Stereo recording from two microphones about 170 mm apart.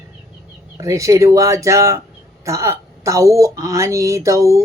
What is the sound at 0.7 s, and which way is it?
Speech, 20° right (ahead or behind).